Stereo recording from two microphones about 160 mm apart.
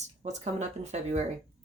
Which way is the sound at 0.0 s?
45° right (ahead or behind).